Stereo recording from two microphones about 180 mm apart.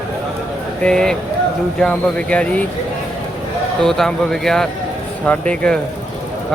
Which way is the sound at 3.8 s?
5° left (ahead or behind).